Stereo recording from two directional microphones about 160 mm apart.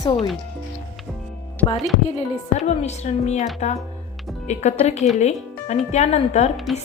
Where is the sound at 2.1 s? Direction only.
45° left (ahead or behind).